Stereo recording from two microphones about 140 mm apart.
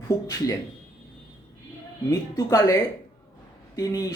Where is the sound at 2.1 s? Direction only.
25° left (ahead or behind).